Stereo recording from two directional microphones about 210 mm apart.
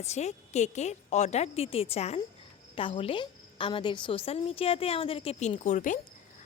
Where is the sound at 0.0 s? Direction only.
30° left (ahead or behind).